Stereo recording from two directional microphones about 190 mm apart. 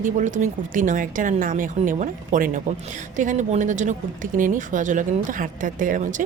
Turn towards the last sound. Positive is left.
turn(degrees=-40)  # may be behind; listen again after turning